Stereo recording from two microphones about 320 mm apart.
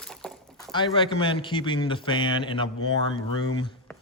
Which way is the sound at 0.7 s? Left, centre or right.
Centre.